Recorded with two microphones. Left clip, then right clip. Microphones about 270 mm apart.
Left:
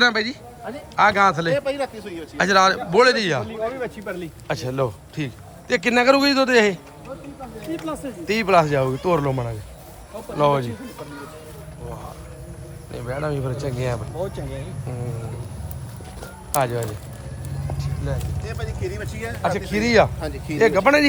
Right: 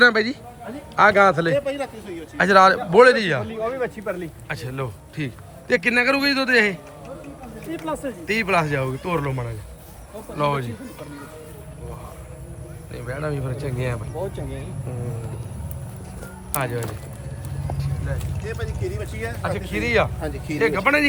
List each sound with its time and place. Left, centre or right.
0.0 s speech: centre
1.5 s speech: left
2.4 s speech: centre
4.4 s a man's voice: centre
8.4 s a man's voice: centre
12.9 s a man's voice: centre
16.5 s speech: centre
18.4 s speech: left
19.4 s a man's voice: centre
20.2 s speech: centre
20.6 s a man's voice: centre